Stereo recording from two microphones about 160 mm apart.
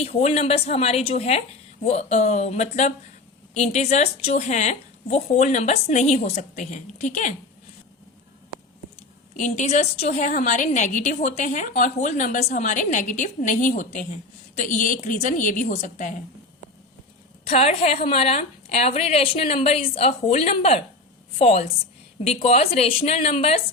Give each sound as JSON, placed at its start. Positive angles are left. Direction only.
{"t": 0.0, "sound": "a woman's voice", "side_deg": 40}
{"t": 9.3, "sound": "a woman's voice", "side_deg": 50}
{"t": 17.4, "sound": "a woman's voice", "side_deg": 40}